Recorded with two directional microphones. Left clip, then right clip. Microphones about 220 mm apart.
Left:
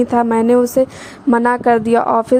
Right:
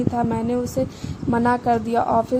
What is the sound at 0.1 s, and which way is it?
A woman's voice, 35° left (ahead or behind).